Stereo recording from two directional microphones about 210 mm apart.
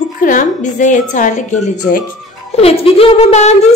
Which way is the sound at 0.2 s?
40° left (ahead or behind).